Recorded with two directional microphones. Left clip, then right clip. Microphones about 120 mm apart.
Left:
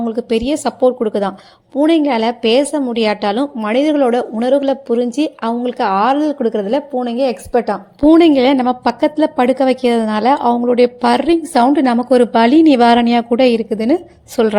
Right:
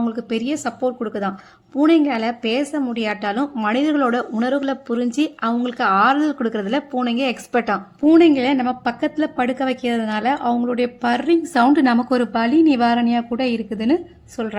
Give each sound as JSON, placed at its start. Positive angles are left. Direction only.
{"t": 0.1, "sound": "a woman's voice", "side_deg": 25}
{"t": 8.2, "sound": "a woman's voice", "side_deg": 45}
{"t": 12.3, "sound": "a woman's voice", "side_deg": 50}
{"t": 14.4, "sound": "a woman's voice", "side_deg": 60}